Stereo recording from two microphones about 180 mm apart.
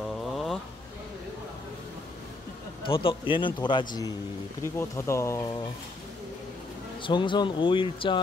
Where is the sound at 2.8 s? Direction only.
30° left (ahead or behind).